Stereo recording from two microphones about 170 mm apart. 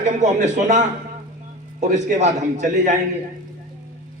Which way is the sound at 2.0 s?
45° right (ahead or behind).